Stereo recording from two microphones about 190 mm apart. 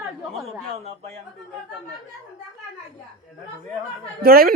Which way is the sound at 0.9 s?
35° right (ahead or behind).